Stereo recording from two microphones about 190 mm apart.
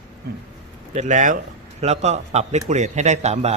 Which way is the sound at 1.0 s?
40° right (ahead or behind).